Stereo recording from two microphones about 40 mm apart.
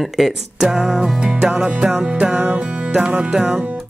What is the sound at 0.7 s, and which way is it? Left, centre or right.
Music, centre.